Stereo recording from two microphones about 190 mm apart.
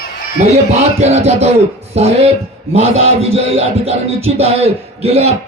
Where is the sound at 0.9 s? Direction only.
35° right (ahead or behind).